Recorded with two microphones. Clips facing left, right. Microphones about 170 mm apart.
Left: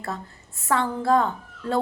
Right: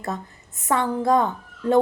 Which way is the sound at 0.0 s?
20° right (ahead or behind).